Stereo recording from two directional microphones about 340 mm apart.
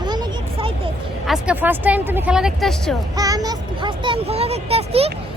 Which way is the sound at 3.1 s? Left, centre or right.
Centre.